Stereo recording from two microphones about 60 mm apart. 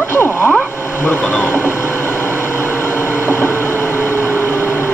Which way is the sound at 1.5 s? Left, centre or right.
Left.